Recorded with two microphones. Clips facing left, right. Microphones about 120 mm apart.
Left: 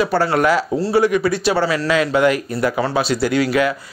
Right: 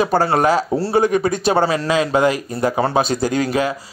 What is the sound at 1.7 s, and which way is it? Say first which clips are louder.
Speech: even; 25° right (ahead or behind).